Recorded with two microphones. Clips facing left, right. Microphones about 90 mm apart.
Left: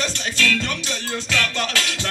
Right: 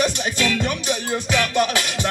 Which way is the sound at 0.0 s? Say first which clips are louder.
Right 3 dB; 15° right (ahead or behind).